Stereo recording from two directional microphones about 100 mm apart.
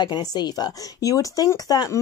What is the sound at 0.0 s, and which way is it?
Speech, 45° left (ahead or behind).